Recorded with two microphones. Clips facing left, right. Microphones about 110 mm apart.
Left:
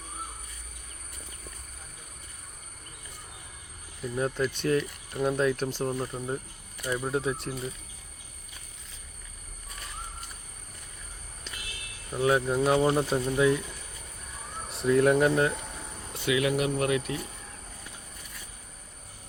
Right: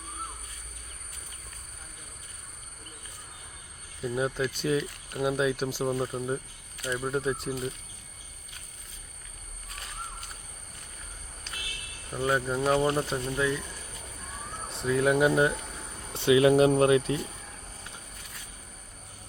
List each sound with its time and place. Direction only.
4.4 s speech: 5° right (ahead or behind)
12.1 s speech: 5° left (ahead or behind)
14.7 s speech: centre (ahead or behind)
16.1 s speech: 30° right (ahead or behind)